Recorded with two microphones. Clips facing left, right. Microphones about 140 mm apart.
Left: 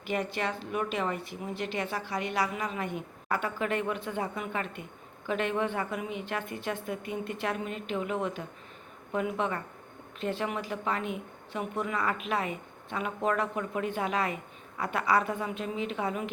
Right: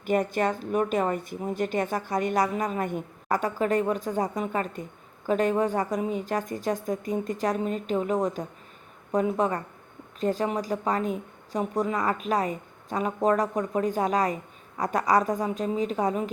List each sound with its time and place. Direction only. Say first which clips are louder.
0.0 s a woman's voice: right 7 dB; 45° right (ahead or behind)